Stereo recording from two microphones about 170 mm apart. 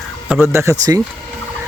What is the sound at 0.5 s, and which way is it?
Speech, 15° right (ahead or behind).